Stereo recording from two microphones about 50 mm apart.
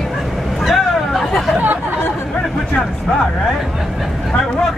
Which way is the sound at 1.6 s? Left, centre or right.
Right.